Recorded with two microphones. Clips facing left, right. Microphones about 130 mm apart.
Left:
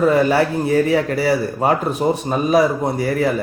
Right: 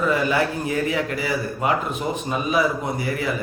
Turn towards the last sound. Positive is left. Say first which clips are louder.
# left 7 dB
turn(degrees=40)  # may be behind; listen again after turning